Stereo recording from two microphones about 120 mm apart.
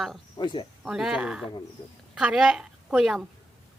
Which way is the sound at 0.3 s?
40° left (ahead or behind).